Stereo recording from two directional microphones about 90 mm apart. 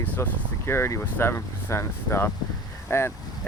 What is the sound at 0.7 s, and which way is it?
Speech, 30° left (ahead or behind).